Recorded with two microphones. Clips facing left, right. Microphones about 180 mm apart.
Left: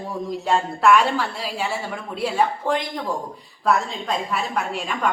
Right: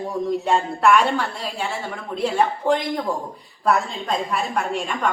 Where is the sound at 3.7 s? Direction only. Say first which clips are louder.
Right 1 dB; centre (ahead or behind).